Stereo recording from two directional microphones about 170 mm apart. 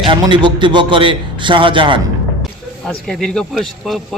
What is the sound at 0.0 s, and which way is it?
A man's voice, 30° right (ahead or behind).